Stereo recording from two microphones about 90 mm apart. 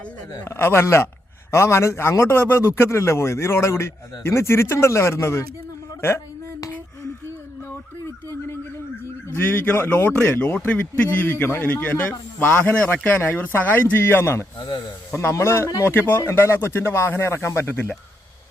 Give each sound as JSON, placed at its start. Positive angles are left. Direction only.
{"t": 0.4, "sound": "a man's voice", "side_deg": 30}
{"t": 6.0, "sound": "a sound", "side_deg": 25}
{"t": 9.3, "sound": "a man's voice", "side_deg": 25}